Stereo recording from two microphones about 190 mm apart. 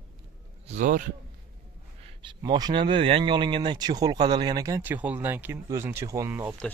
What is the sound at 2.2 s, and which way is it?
Speech, 20° right (ahead or behind).